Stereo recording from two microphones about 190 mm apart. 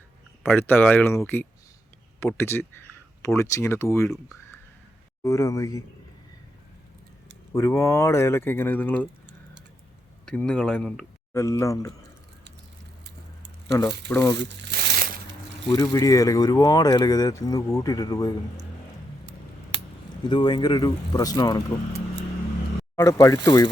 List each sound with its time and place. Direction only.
0.7 s speech: 10° left (ahead or behind)
5.2 s speech: 15° left (ahead or behind)
7.5 s speech: 15° left (ahead or behind)
10.2 s speech: 5° left (ahead or behind)
11.3 s speech: 15° left (ahead or behind)
13.7 s speech: 15° left (ahead or behind)
14.3 s crumpling: 65° right (ahead or behind)
15.6 s speech: 20° left (ahead or behind)
20.2 s speech: 25° left (ahead or behind)
23.0 s speech: 15° left (ahead or behind)